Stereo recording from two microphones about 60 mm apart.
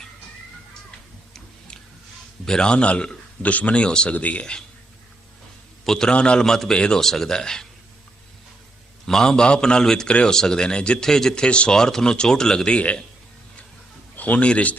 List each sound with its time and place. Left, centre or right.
1.3 s tick-tock: centre
2.4 s speech: centre
5.8 s speech: centre
9.0 s speech: centre
14.2 s speech: left